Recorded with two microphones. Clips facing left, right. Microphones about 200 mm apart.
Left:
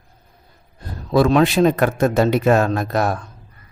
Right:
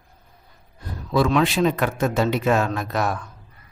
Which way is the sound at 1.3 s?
40° left (ahead or behind).